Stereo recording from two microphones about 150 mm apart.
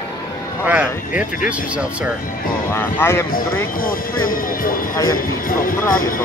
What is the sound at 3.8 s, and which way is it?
A man's voice, 70° left (ahead or behind).